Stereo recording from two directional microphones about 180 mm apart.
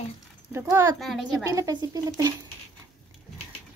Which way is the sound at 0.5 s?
15° right (ahead or behind).